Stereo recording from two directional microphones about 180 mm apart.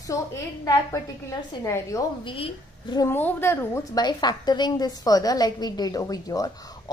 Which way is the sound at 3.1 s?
10° left (ahead or behind).